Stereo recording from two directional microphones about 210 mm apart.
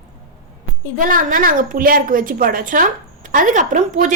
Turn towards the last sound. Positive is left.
turn(degrees=-35)  # may be behind; listen again after turning